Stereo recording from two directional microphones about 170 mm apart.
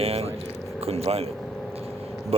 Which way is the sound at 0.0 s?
35° right (ahead or behind).